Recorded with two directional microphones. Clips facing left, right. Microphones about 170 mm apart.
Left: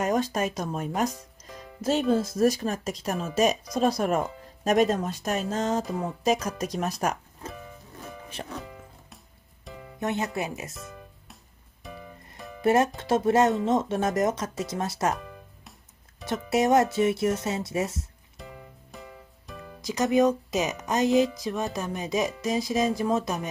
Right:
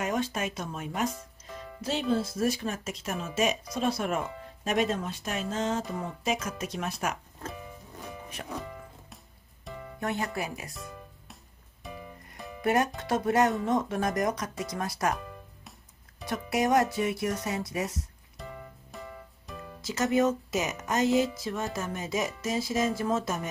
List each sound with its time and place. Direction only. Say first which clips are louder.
0.0 s speech: left 5 dB; 40° left (ahead or behind)
8.5 s music: right 1 dB; centre (ahead or behind)
9.9 s speech: left 3 dB; 20° left (ahead or behind)
10.7 s music: even; centre (ahead or behind)
12.6 s speech: left 4 dB; 25° left (ahead or behind)
16.3 s speech: left 4 dB; 25° left (ahead or behind)
18.4 s music: right 1 dB; centre (ahead or behind)
19.8 s speech: left 3 dB; 15° left (ahead or behind)